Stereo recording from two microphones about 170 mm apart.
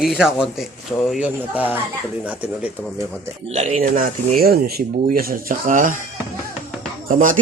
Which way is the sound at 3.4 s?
40° right (ahead or behind).